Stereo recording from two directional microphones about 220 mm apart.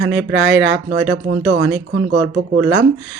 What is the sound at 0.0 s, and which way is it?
Speech, 55° right (ahead or behind).